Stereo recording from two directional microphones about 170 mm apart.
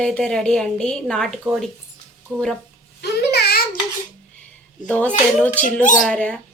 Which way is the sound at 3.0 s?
75° left (ahead or behind).